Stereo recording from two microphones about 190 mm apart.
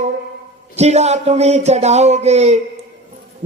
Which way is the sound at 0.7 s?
35° right (ahead or behind).